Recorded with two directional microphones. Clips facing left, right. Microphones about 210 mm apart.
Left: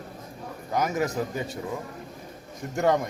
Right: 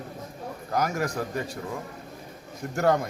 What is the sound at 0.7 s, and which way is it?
Speech, centre (ahead or behind).